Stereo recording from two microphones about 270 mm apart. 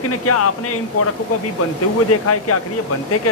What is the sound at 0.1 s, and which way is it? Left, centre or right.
Speech, left.